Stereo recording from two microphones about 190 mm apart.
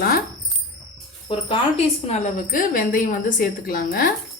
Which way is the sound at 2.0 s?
35° left (ahead or behind).